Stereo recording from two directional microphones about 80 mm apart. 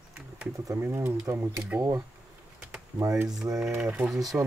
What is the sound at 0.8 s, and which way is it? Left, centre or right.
Speech, right.